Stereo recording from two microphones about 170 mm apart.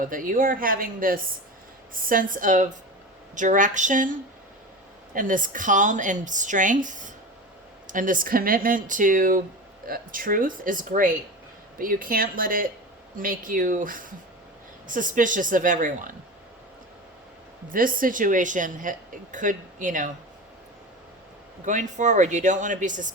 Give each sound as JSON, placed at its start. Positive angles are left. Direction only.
{"t": 0.0, "sound": "speech", "side_deg": -55}
{"t": 17.7, "sound": "speech", "side_deg": -55}
{"t": 21.6, "sound": "speech", "side_deg": -45}